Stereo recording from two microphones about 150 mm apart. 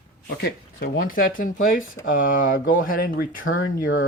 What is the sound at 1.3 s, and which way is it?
Speech, 65° left (ahead or behind).